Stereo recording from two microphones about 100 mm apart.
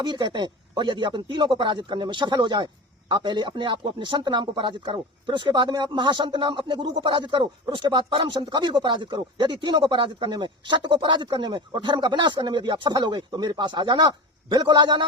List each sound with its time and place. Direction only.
0.0 s speech: 50° right (ahead or behind)